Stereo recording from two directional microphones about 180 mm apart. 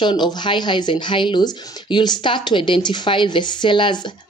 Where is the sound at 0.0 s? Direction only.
25° left (ahead or behind).